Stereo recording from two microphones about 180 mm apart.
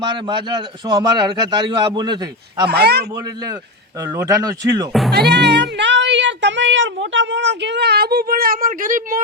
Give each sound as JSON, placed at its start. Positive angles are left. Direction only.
{"t": 0.0, "sound": "a man's voice", "side_deg": -25}
{"t": 2.6, "sound": "a man's voice", "side_deg": -65}
{"t": 3.2, "sound": "a man's voice", "side_deg": -20}
{"t": 4.9, "sound": "speech", "side_deg": 0}
{"t": 5.1, "sound": "speech", "side_deg": -65}